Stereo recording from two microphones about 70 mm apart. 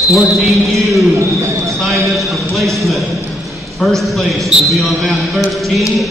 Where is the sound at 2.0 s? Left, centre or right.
Centre.